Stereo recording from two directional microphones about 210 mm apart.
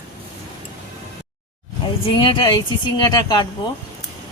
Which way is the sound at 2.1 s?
25° left (ahead or behind).